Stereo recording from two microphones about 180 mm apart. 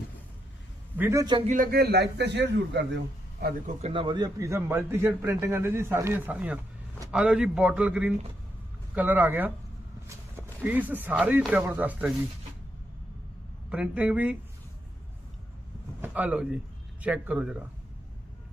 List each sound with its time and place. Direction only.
0.9 s a man's voice: 15° right (ahead or behind)
1.5 s a man's voice: 50° right (ahead or behind); by 3.0 s 80° right
3.8 s a man's voice: 30° right (ahead or behind); by 12.1 s 10° right (ahead or behind)
13.7 s a man's voice: 5° right (ahead or behind)
16.0 s a man's voice: 10° right (ahead or behind)